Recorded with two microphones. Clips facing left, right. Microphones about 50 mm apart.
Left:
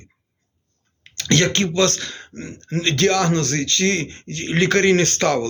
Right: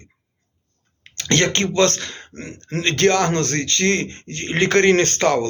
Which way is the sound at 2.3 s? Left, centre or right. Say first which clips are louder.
Left 1 dB; right.